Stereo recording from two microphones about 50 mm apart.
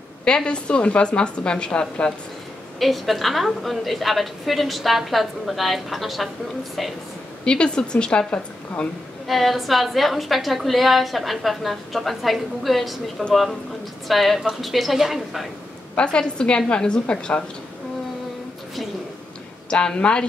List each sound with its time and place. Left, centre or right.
0.2 s a woman's voice: centre
2.8 s a woman's voice: centre
7.4 s a woman's voice: centre
9.3 s a woman's voice: centre
15.9 s a woman's voice: left
19.7 s a woman's voice: centre